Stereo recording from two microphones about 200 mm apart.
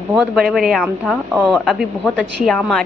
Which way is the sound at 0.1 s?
Centre (ahead or behind).